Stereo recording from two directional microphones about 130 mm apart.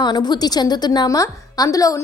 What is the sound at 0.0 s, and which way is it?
A woman's voice, 35° left (ahead or behind).